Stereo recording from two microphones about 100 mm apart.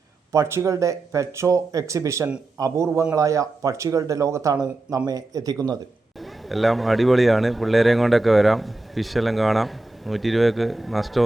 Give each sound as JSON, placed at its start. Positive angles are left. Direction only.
{"t": 0.3, "sound": "speech", "side_deg": -25}
{"t": 6.1, "sound": "speech", "side_deg": 0}